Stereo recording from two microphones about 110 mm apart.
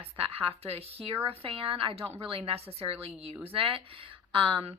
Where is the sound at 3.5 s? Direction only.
55° right (ahead or behind).